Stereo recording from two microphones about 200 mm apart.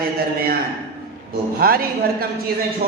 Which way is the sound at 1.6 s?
45° right (ahead or behind).